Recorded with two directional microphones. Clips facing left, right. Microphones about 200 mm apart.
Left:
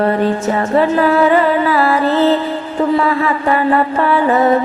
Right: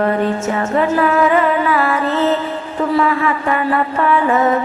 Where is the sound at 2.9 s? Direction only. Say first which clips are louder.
Left 1 dB; 35° left (ahead or behind).